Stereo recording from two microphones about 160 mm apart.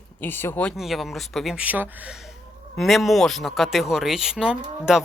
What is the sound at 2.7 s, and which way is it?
Speech, centre (ahead or behind).